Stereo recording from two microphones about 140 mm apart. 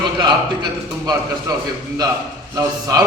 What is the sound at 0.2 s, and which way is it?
A man's voice, 30° right (ahead or behind).